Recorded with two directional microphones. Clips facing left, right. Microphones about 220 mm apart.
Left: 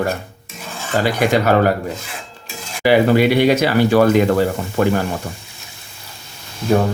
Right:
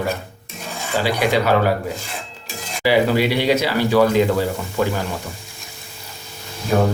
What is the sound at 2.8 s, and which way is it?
Speech, 55° left (ahead or behind).